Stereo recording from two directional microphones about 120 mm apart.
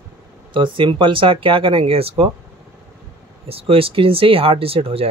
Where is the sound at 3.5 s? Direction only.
50° right (ahead or behind).